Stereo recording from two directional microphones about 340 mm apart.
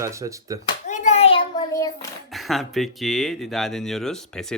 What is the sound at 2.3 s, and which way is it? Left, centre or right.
Speech, centre.